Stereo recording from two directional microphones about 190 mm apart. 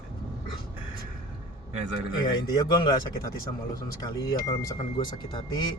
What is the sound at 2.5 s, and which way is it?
Speech, 20° left (ahead or behind).